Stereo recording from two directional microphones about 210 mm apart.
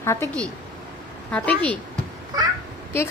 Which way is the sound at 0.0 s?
10° left (ahead or behind).